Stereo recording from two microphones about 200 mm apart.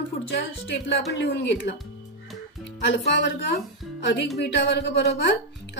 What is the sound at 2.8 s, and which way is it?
Speech, 60° left (ahead or behind).